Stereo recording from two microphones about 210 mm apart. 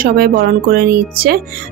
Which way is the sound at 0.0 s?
45° right (ahead or behind).